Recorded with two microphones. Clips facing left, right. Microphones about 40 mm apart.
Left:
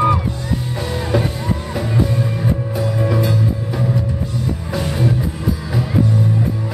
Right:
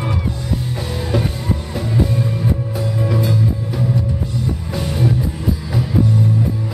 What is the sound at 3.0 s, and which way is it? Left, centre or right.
Music, centre.